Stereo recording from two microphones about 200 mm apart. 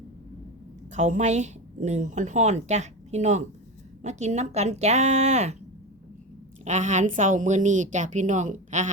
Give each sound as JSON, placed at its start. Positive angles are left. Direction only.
{"t": 0.9, "sound": "a woman's voice", "side_deg": -35}
{"t": 6.7, "sound": "a woman's voice", "side_deg": -35}